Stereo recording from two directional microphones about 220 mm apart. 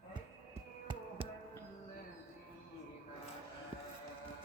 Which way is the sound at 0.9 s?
25° right (ahead or behind).